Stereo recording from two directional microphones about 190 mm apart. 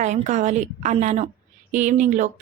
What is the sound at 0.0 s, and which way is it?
Speech, 40° right (ahead or behind).